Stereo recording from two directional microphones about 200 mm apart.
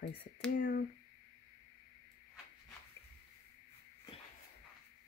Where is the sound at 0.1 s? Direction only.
55° left (ahead or behind).